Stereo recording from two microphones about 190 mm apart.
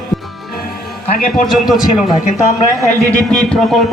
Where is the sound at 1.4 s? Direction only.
Centre (ahead or behind).